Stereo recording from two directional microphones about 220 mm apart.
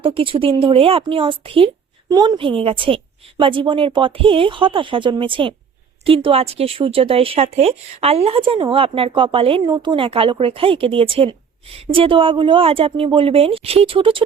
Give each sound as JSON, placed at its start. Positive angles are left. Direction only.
{"t": 0.0, "sound": "speech", "side_deg": -25}